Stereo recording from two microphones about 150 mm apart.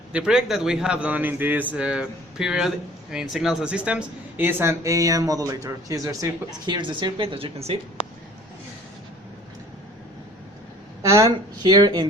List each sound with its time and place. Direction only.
0.1 s a man's voice: 5° right (ahead or behind); by 7.8 s 40° right (ahead or behind)
11.0 s speech: 25° right (ahead or behind)